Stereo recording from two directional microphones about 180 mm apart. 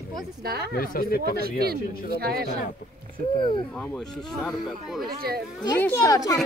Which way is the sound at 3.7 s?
5° left (ahead or behind).